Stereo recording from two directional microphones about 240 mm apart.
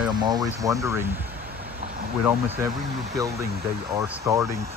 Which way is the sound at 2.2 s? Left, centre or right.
Centre.